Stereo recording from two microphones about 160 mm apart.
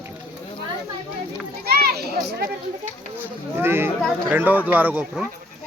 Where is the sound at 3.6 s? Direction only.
15° right (ahead or behind).